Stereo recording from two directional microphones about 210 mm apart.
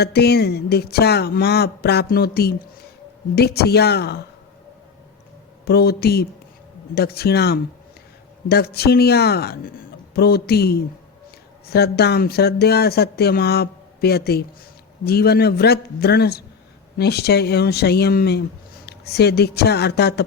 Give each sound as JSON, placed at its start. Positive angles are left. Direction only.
{"t": 0.0, "sound": "speech", "side_deg": 50}
{"t": 5.6, "sound": "speech", "side_deg": 50}